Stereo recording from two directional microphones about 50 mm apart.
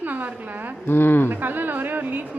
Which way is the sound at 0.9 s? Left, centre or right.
Left.